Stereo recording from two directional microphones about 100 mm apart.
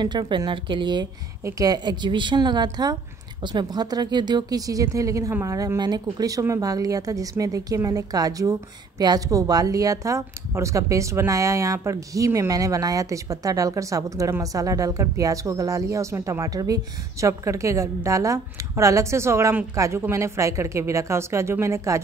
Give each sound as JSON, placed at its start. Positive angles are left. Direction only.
{"t": 0.0, "sound": "a woman's voice", "side_deg": -50}
{"t": 1.4, "sound": "a woman's voice", "side_deg": -40}